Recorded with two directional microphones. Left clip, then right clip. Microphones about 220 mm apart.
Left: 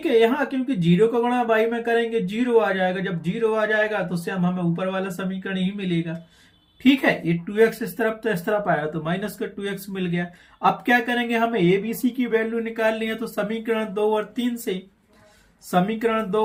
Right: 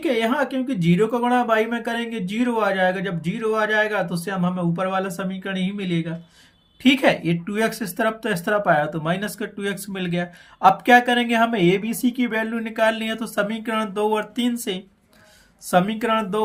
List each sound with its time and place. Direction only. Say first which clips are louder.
0.0 s speech: left 2 dB; 30° right (ahead or behind)